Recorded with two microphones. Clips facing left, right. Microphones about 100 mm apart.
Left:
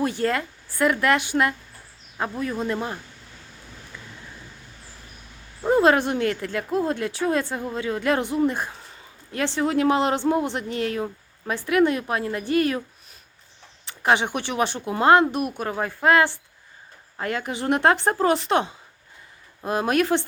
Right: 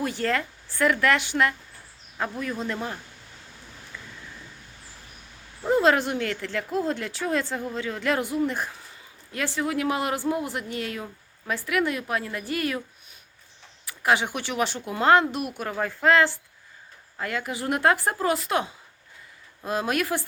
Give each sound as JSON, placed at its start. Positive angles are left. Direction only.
{"t": 0.0, "sound": "a man's voice", "side_deg": 20}
{"t": 5.6, "sound": "speech", "side_deg": 25}
{"t": 13.8, "sound": "speech", "side_deg": 25}
{"t": 19.9, "sound": "speech", "side_deg": 25}